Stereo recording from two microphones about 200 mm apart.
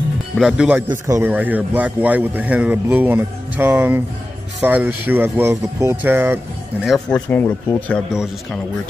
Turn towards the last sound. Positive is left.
turn(degrees=10)  # may be behind; listen again after turning